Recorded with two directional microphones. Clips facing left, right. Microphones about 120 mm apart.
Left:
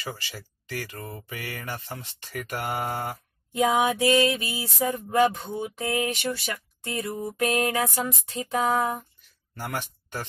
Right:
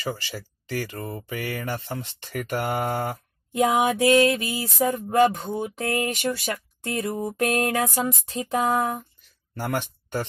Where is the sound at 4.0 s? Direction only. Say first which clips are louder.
Right 3 dB; 45° right (ahead or behind).